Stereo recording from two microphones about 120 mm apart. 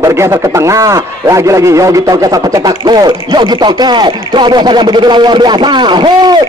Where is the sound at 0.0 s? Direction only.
25° right (ahead or behind).